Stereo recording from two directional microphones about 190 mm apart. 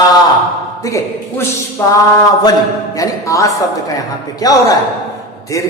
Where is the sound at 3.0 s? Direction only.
15° left (ahead or behind).